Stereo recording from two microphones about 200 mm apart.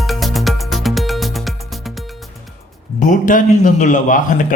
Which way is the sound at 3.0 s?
40° left (ahead or behind).